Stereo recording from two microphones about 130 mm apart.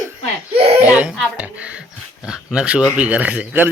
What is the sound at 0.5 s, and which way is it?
Belly laugh, 50° right (ahead or behind).